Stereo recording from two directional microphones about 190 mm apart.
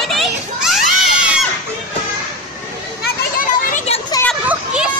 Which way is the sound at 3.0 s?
50° left (ahead or behind).